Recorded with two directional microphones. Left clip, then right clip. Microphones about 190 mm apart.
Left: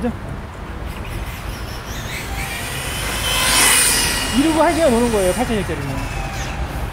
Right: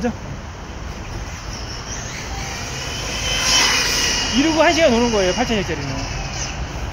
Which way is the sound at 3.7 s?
45° left (ahead or behind).